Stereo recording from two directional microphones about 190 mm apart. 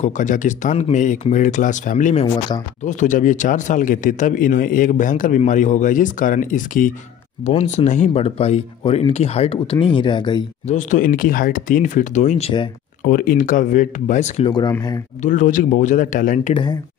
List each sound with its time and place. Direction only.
0.0 s speech: 40° left (ahead or behind); by 10.4 s 25° left (ahead or behind)
10.7 s speech: 40° left (ahead or behind)
13.1 s speech: 50° left (ahead or behind)
14.5 s speech: 20° left (ahead or behind)
15.2 s speech: 40° left (ahead or behind)